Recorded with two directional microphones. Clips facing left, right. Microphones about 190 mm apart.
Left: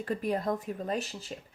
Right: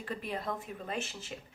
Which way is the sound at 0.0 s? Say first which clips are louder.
Left 7 dB; 45° left (ahead or behind).